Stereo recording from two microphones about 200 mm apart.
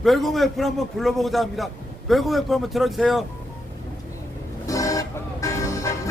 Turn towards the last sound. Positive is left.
turn(degrees=15)  # may be behind; listen again after turning